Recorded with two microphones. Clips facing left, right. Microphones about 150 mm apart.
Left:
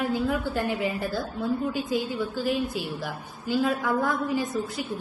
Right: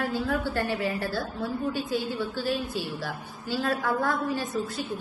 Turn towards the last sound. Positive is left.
turn(degrees=15)  # may be behind; listen again after turning